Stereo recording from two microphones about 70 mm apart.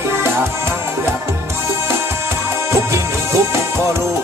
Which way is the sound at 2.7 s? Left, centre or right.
Right.